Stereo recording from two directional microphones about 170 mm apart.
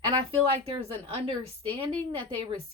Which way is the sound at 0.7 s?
35° right (ahead or behind).